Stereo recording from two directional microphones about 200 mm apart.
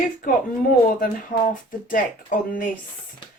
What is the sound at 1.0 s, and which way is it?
Speech, 40° left (ahead or behind).